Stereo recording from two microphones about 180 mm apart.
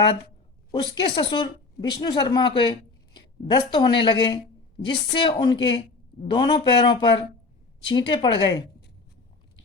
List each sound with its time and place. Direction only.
1.1 s a woman's voice: 25° left (ahead or behind)